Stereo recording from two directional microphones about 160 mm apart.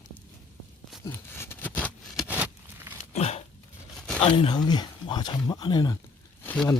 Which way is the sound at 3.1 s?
40° left (ahead or behind).